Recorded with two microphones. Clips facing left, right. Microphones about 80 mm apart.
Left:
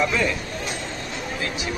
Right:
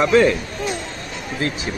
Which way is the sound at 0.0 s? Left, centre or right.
Right.